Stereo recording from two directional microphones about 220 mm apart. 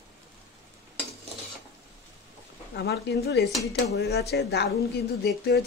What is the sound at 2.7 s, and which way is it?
Speech, 45° left (ahead or behind).